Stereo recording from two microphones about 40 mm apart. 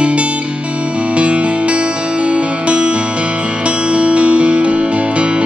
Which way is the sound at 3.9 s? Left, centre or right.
Right.